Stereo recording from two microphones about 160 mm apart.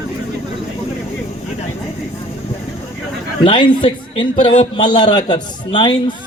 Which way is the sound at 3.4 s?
35° left (ahead or behind).